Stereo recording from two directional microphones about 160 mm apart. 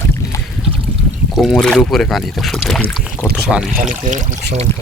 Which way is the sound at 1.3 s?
Centre (ahead or behind).